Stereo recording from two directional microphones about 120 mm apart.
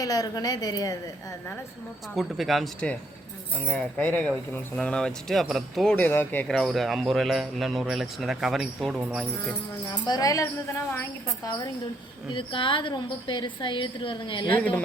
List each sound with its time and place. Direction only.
0.0 s a woman's voice: 30° left (ahead or behind)
2.1 s speech: centre (ahead or behind)
3.5 s speech: 10° left (ahead or behind)
6.1 s speech: 15° left (ahead or behind)
6.5 s speech: centre (ahead or behind)
9.9 s a woman's voice: 35° left (ahead or behind)
12.3 s a woman's voice: 45° left (ahead or behind)